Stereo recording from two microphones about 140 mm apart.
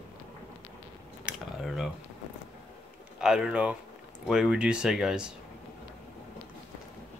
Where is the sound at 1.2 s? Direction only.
Centre (ahead or behind).